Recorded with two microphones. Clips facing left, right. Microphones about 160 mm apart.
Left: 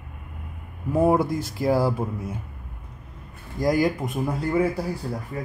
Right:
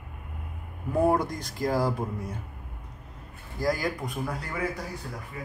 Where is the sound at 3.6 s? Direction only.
20° left (ahead or behind).